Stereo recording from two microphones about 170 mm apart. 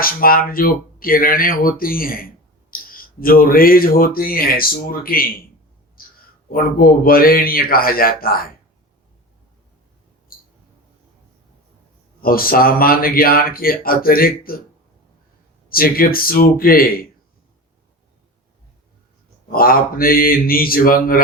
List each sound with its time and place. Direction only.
0.0 s speech: 60° left (ahead or behind)
6.0 s a sound: 60° left (ahead or behind)
6.5 s speech: 60° left (ahead or behind)
12.2 s speech: 60° left (ahead or behind)
15.7 s speech: 60° left (ahead or behind)
19.5 s speech: 60° left (ahead or behind)